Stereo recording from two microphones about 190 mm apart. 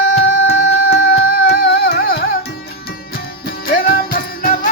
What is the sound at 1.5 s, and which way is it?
Music, 60° left (ahead or behind).